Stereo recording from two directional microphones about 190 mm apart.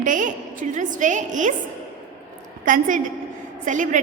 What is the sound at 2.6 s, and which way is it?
A woman's voice, 45° right (ahead or behind).